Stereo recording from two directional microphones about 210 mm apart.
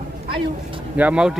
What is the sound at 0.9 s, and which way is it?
Speech, 5° right (ahead or behind).